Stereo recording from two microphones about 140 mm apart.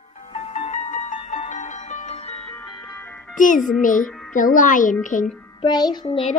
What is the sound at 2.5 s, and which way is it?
Music, 30° left (ahead or behind).